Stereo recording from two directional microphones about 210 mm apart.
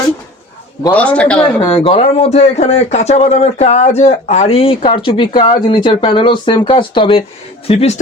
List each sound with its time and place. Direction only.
0.9 s a man's voice: 5° left (ahead or behind)
1.4 s speech: 25° left (ahead or behind)